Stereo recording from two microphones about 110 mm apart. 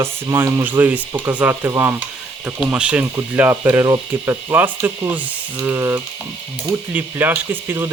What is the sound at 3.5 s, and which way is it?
Speech, 25° right (ahead or behind).